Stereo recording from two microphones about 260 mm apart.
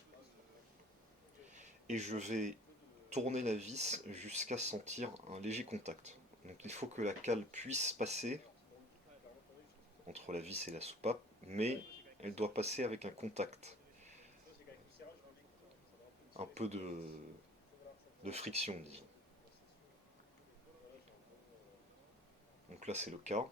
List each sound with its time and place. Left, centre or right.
1.5 s speech: right
10.1 s speech: right
16.4 s speech: right
18.2 s speech: right
22.8 s speech: right